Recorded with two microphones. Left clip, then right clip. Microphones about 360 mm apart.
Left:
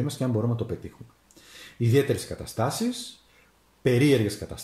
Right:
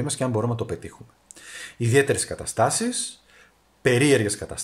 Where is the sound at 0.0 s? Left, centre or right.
Right.